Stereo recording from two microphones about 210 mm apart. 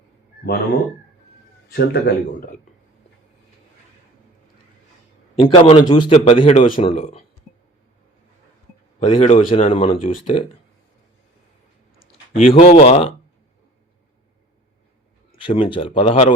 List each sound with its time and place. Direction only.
1.7 s speech: 50° left (ahead or behind)
5.4 s a man's voice: 25° left (ahead or behind)
9.0 s a man's voice: 30° left (ahead or behind)
12.3 s a man's voice: 25° left (ahead or behind)
15.4 s a man's voice: 25° left (ahead or behind)